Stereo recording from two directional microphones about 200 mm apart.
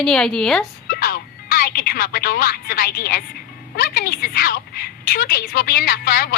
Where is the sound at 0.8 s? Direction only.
50° left (ahead or behind).